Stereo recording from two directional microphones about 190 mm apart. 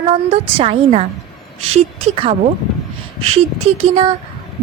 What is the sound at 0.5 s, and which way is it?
Speech, 30° right (ahead or behind).